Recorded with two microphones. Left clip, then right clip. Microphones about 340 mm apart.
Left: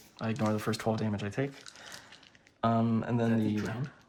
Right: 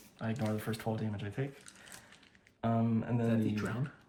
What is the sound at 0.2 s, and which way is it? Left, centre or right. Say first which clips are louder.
Speech: left 5 dB; centre.